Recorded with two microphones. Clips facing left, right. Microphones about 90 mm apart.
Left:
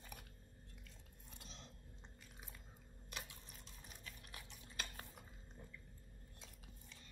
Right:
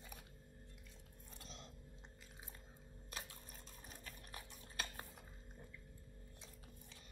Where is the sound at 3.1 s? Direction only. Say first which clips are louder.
Even; 40° right (ahead or behind).